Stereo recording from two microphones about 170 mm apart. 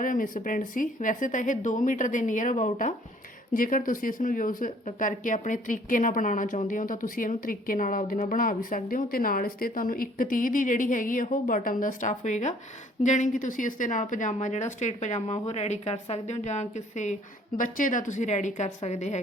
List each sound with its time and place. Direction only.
0.0 s a woman's voice: 50° left (ahead or behind)